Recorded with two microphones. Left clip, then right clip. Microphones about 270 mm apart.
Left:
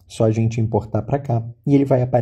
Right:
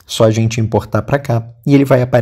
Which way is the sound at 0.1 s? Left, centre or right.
Right.